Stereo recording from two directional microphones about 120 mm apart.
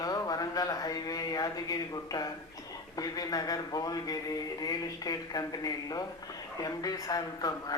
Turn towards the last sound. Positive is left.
turn(degrees=30)  # may be behind; listen again after turning